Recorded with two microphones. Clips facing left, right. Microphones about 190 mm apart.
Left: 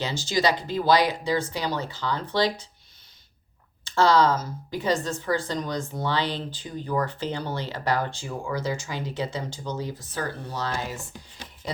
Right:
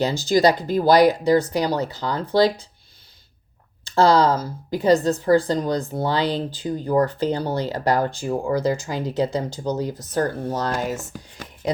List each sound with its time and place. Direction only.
0.3 s a woman's voice: 40° right (ahead or behind)
3.8 s a woman's voice: 35° right (ahead or behind)